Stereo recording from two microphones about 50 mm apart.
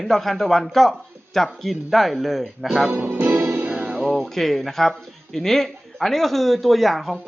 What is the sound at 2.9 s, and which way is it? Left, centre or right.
Music, right.